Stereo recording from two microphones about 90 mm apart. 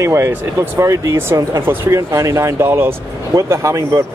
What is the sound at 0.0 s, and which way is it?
Speech, 35° right (ahead or behind).